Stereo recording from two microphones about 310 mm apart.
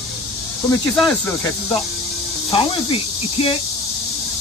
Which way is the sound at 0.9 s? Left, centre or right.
Centre.